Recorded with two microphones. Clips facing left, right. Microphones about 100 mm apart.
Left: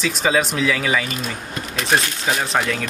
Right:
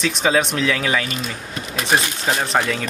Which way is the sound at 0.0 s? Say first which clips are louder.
Right 1 dB; centre (ahead or behind).